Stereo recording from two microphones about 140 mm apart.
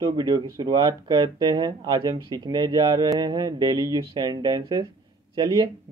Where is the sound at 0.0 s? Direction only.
30° right (ahead or behind).